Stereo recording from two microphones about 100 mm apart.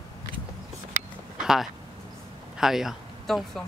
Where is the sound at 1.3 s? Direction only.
5° right (ahead or behind).